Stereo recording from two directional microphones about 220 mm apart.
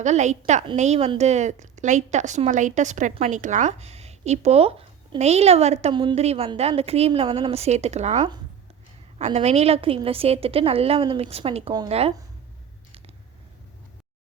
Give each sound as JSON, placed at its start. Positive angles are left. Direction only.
{"t": 0.0, "sound": "a woman's voice", "side_deg": -30}